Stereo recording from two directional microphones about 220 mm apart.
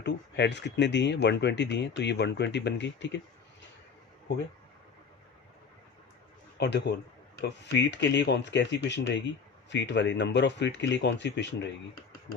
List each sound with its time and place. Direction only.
0.0 s speech: 50° left (ahead or behind)
6.6 s speech: 50° left (ahead or behind)